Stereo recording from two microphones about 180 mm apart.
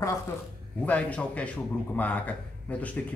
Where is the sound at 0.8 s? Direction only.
10° left (ahead or behind).